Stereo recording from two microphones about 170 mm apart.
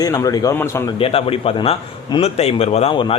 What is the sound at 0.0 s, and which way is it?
Speech, 20° left (ahead or behind).